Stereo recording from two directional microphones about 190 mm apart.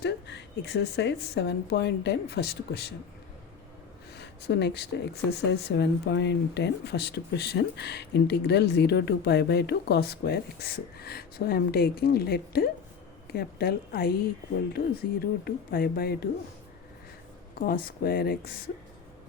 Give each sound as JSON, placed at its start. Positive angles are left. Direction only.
{"t": 0.0, "sound": "speech", "side_deg": 65}
{"t": 4.2, "sound": "speech", "side_deg": 65}
{"t": 15.2, "sound": "speech", "side_deg": 55}
{"t": 17.5, "sound": "speech", "side_deg": 50}